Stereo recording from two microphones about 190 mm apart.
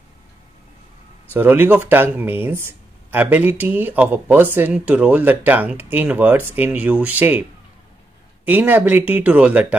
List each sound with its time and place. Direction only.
1.3 s speech: 10° right (ahead or behind)
8.5 s speech: 10° right (ahead or behind)